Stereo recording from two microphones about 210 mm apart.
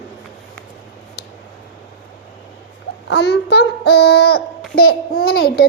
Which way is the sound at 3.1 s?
55° left (ahead or behind).